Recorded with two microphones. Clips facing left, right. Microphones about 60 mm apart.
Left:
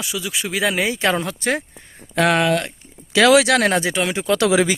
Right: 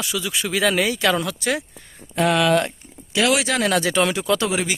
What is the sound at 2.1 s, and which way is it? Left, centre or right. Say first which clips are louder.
Speech: left 2 dB; left.